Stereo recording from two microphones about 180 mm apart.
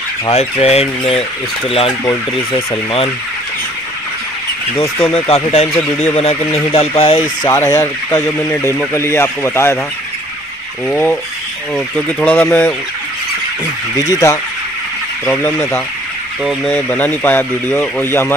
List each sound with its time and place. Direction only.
0.3 s speech: 35° left (ahead or behind)
5.1 s speech: 35° left (ahead or behind)
7.2 s speech: 10° left (ahead or behind)
10.9 s speech: 10° left (ahead or behind)
13.9 s speech: 20° left (ahead or behind)